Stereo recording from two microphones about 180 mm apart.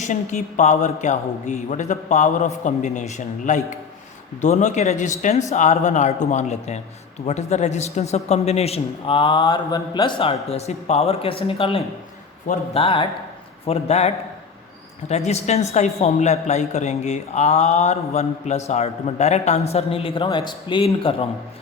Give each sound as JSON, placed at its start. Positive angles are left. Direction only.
{"t": 0.0, "sound": "speech", "side_deg": 40}
{"t": 15.1, "sound": "speech", "side_deg": 35}